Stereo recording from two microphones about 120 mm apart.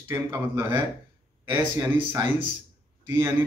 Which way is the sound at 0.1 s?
25° right (ahead or behind).